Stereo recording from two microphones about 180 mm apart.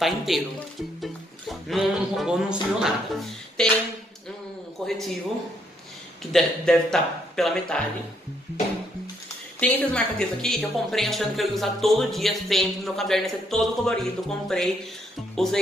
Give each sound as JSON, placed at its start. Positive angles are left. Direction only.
{"t": 0.0, "sound": "music", "side_deg": 0}
{"t": 3.6, "sound": "a woman's voice", "side_deg": 5}
{"t": 4.8, "sound": "a woman's voice", "side_deg": 5}
{"t": 6.3, "sound": "a woman's voice", "side_deg": 5}
{"t": 9.6, "sound": "a woman's voice", "side_deg": 5}